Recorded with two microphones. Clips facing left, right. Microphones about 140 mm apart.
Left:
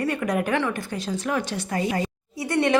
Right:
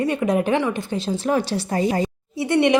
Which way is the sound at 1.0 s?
30° right (ahead or behind).